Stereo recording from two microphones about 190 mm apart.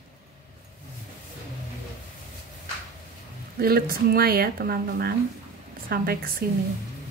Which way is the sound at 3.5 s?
50° right (ahead or behind).